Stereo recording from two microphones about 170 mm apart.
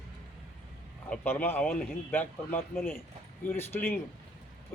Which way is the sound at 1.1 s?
10° left (ahead or behind).